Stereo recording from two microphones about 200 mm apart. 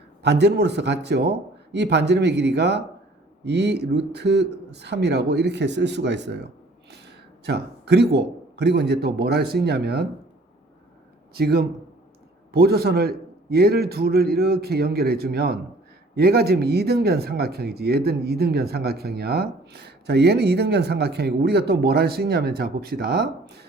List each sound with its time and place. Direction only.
0.2 s a man's voice: 60° right (ahead or behind)
11.3 s speech: 50° right (ahead or behind)